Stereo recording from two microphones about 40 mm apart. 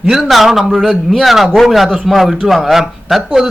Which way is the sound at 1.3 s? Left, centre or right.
Centre.